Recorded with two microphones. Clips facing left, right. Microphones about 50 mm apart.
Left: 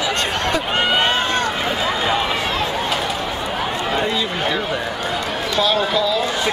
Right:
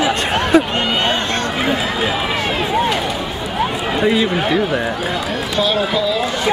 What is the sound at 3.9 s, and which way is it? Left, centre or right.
Speech, centre.